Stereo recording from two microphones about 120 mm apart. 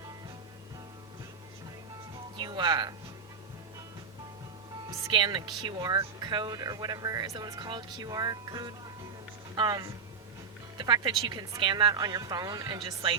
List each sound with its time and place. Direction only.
2.4 s speech: 40° right (ahead or behind)
5.1 s speech: 40° right (ahead or behind)